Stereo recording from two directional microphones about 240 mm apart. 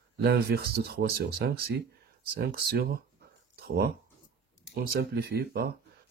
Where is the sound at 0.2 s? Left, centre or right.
Right.